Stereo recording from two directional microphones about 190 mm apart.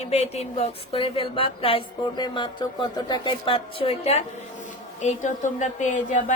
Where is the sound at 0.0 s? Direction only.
35° left (ahead or behind).